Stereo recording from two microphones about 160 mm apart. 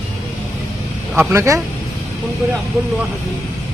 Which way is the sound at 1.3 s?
15° right (ahead or behind).